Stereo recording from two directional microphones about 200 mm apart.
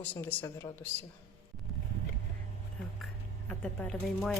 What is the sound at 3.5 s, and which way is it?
Speech, 5° left (ahead or behind).